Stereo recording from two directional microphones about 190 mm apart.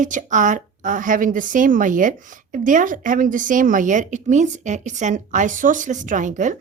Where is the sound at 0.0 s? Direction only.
40° right (ahead or behind).